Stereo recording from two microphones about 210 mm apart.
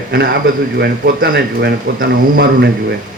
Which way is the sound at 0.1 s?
50° right (ahead or behind).